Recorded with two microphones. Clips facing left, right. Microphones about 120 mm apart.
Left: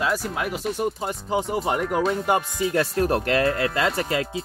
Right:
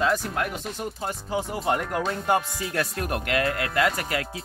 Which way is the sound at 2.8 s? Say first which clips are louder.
Left 6 dB; 30° left (ahead or behind).